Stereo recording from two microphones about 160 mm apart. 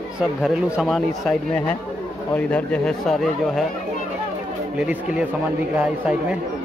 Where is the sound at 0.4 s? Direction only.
Centre (ahead or behind).